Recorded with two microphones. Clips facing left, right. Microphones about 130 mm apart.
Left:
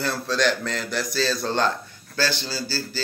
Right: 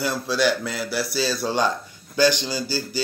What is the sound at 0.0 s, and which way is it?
A man's voice, 10° right (ahead or behind).